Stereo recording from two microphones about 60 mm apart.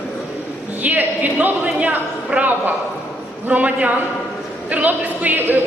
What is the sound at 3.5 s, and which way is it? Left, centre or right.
A woman's voice, right.